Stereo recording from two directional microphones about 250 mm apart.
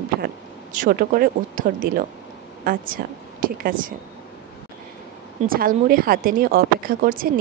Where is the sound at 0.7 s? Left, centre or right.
Right.